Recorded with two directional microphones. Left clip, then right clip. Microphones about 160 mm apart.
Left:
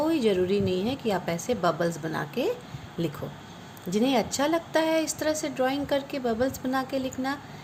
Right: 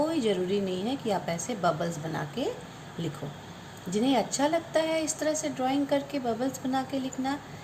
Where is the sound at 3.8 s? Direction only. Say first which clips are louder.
Left 2 dB; 50° left (ahead or behind).